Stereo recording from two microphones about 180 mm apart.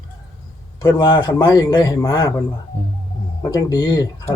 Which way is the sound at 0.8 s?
25° left (ahead or behind).